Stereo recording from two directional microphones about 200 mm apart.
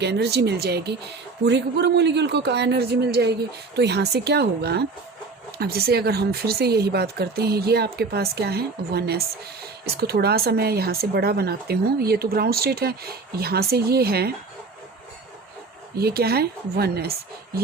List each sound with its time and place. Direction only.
0.0 s a man's voice: 55° right (ahead or behind)
16.0 s speech: 50° right (ahead or behind)